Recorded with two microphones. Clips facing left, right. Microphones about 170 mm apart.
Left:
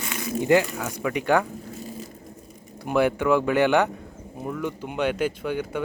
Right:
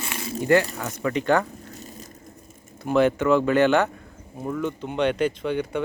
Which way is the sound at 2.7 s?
10° left (ahead or behind).